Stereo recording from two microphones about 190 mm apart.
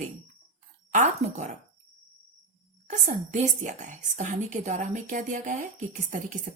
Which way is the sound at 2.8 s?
40° right (ahead or behind).